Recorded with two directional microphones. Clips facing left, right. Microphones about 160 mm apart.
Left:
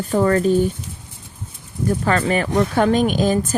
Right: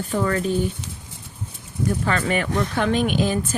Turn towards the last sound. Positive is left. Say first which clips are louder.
# left 4 dB
turn(degrees=40)  # may be behind; listen again after turning